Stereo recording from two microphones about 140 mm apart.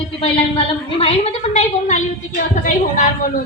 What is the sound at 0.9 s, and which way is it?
A woman's voice, 50° left (ahead or behind).